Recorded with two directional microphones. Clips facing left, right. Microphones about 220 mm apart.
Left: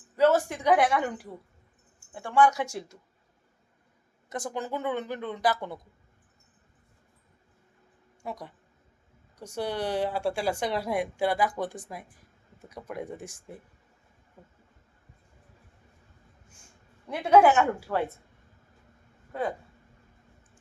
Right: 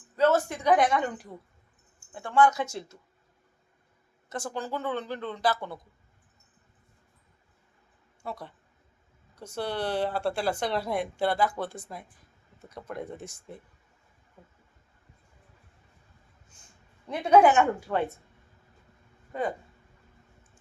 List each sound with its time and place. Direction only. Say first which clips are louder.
0.2 s speech: left 1 dB; 15° left (ahead or behind)
4.3 s speech: left 1 dB; 20° left (ahead or behind)
8.2 s speech: even; 15° left (ahead or behind)
17.6 s speech: right 1 dB; 5° left (ahead or behind)
19.3 s speech: even; 5° left (ahead or behind)